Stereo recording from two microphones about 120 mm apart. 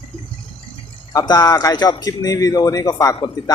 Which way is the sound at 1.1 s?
30° left (ahead or behind).